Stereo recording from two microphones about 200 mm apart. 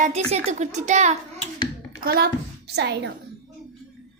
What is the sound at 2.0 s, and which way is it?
A woman's voice, 50° right (ahead or behind).